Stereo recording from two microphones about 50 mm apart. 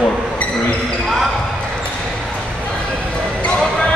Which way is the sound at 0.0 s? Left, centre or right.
Left.